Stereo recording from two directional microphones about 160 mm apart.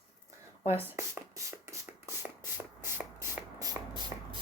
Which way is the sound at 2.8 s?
15° right (ahead or behind).